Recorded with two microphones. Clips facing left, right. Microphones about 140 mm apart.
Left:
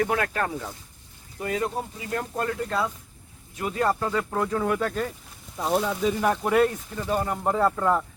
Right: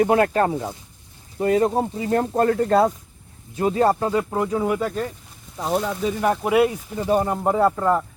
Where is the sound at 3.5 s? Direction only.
30° right (ahead or behind); by 8.1 s 10° right (ahead or behind).